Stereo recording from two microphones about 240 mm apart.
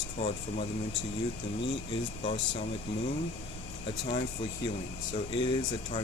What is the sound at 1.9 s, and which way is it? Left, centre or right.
Speech, left.